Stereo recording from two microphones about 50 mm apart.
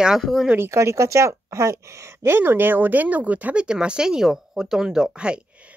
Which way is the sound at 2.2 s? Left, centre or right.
Right.